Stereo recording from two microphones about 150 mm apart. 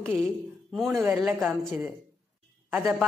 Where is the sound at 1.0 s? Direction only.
10° right (ahead or behind).